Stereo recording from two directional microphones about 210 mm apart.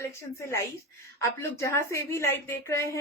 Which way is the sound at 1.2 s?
15° left (ahead or behind).